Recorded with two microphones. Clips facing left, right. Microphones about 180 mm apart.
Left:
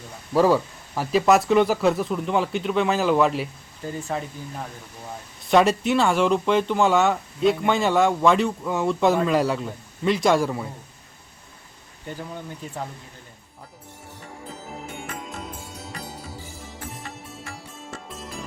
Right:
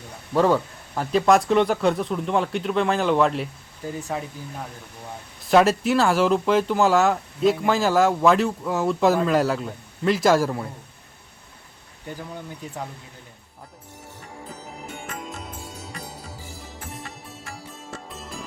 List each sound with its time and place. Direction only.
0.3 s speech: 5° left (ahead or behind)